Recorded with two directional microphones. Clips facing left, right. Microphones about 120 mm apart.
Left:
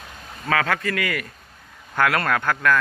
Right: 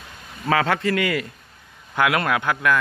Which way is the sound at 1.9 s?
15° right (ahead or behind).